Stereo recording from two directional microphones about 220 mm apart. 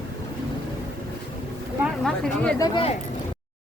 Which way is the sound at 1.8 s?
Centre (ahead or behind).